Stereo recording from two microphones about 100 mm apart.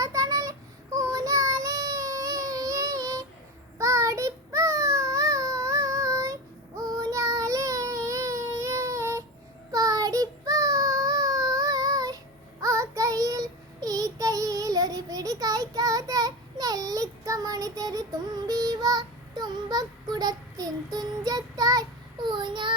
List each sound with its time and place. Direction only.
0.0 s child singing: 35° right (ahead or behind)
22.3 s child singing: 50° right (ahead or behind)